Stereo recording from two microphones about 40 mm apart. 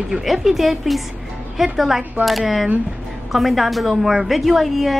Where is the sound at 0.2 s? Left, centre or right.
Centre.